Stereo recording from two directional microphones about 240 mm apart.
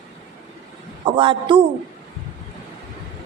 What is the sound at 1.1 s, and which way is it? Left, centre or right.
Speech, centre.